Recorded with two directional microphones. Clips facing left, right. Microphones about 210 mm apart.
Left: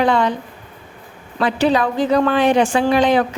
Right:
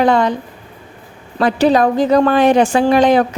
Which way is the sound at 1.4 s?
40° right (ahead or behind).